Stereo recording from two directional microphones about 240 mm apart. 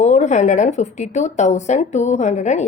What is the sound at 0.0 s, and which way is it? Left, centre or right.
Speech, left.